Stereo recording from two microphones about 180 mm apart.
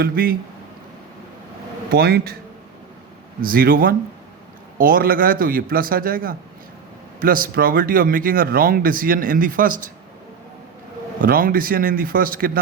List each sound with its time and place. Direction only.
0.0 s speech: 55° right (ahead or behind)
1.9 s speech: 60° right (ahead or behind)
3.4 s speech: 55° right (ahead or behind)
11.2 s speech: 50° right (ahead or behind)